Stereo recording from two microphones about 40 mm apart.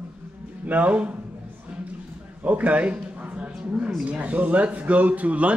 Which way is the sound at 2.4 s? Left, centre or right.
Right.